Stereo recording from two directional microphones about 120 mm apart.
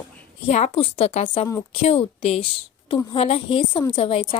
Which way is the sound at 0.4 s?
65° left (ahead or behind).